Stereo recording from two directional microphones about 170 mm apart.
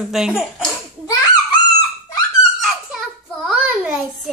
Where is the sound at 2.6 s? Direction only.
Centre (ahead or behind).